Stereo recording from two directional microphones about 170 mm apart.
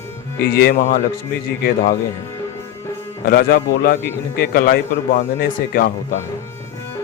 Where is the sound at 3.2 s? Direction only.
65° left (ahead or behind).